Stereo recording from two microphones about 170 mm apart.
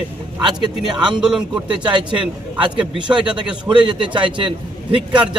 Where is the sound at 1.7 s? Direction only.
25° right (ahead or behind).